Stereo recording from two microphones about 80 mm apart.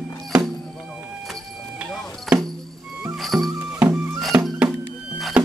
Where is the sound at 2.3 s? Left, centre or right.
Centre.